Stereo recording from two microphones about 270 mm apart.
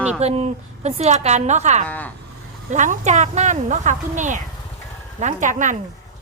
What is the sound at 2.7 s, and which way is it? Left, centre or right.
A woman's voice, right.